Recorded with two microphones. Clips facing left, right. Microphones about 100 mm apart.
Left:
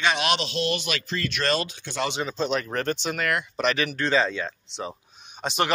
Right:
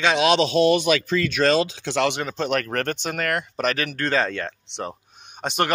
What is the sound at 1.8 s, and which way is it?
Speech, 90° right.